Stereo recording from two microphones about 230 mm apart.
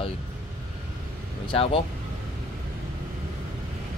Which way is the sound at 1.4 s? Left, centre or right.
Left.